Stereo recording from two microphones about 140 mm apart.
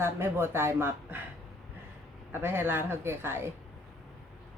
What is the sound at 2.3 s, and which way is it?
A woman's voice, 15° right (ahead or behind).